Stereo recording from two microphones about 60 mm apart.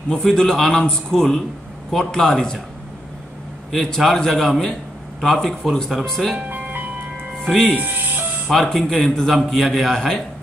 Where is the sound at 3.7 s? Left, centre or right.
Centre.